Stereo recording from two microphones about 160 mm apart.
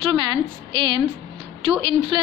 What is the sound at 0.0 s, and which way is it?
A woman's voice, 30° right (ahead or behind).